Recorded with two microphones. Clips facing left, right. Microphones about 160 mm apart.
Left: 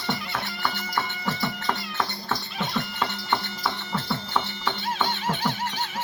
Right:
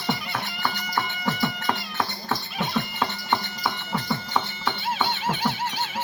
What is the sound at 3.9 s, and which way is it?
Music, 15° right (ahead or behind).